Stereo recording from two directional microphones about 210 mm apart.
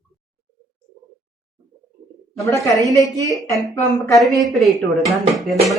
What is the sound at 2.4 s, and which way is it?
A woman's voice, 15° left (ahead or behind).